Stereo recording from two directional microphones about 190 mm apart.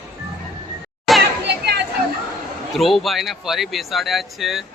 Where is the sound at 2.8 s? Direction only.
Centre (ahead or behind).